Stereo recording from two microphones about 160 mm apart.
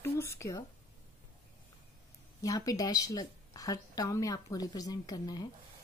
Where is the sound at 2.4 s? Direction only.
20° left (ahead or behind).